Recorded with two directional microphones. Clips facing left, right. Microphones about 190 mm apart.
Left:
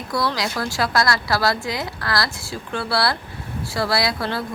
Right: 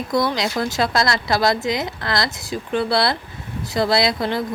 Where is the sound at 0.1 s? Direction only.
20° right (ahead or behind).